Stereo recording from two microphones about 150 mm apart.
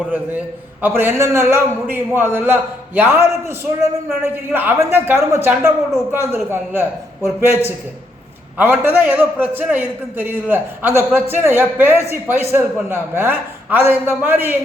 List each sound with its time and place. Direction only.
0.1 s a man's voice: 10° right (ahead or behind)